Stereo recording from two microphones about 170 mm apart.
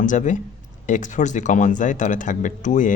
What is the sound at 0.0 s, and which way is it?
Speech, 45° left (ahead or behind).